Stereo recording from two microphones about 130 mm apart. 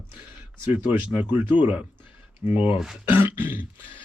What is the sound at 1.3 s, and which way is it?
Speech, 15° right (ahead or behind).